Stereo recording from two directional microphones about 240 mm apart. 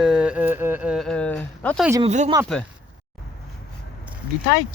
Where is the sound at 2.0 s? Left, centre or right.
Right.